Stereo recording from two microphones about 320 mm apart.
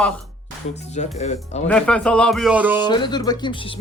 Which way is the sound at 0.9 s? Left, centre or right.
Left.